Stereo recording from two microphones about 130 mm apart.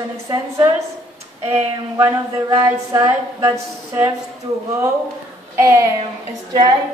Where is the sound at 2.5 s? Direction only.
30° right (ahead or behind).